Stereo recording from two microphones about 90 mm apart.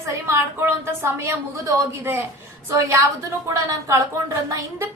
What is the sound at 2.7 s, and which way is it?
A woman's voice, 35° right (ahead or behind).